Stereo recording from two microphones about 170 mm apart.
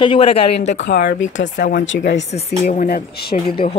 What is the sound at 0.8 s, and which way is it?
Speech, 80° left.